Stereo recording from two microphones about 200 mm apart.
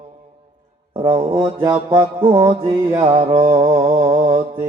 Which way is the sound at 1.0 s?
25° right (ahead or behind).